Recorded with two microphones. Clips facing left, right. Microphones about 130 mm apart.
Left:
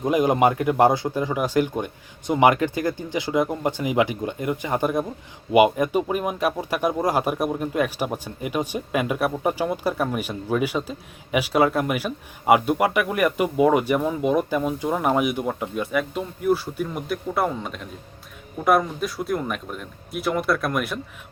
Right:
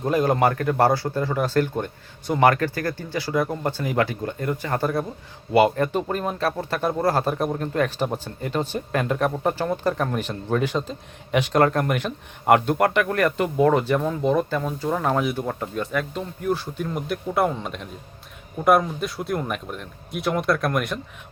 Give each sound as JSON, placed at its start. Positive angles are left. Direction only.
{"t": 0.0, "sound": "a man's voice", "side_deg": 15}